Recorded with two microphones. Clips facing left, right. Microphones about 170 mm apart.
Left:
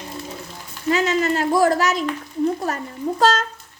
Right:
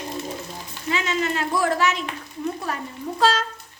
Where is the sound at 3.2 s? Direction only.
45° left (ahead or behind).